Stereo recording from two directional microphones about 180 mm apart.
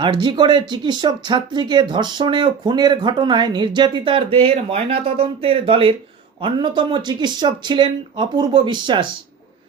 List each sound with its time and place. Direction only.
0.0 s speech: 25° right (ahead or behind)